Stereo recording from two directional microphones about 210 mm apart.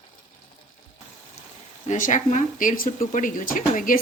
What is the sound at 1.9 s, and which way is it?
Speech, 35° left (ahead or behind).